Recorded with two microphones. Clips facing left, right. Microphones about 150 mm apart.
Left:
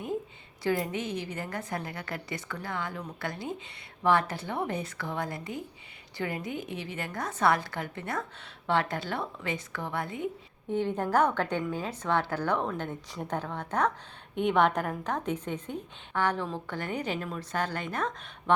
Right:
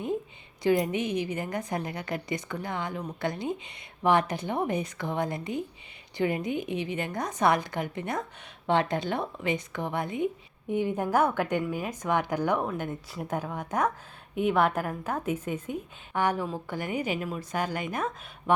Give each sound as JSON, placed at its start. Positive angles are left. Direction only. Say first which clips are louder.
{"t": 0.6, "sound": "a woman's voice", "louder": "right 5 dB", "side_deg": -20}